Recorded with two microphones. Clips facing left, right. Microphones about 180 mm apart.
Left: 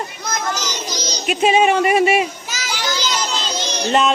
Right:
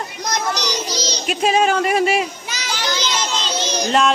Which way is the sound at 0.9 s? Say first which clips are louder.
Right 2 dB; 30° right (ahead or behind).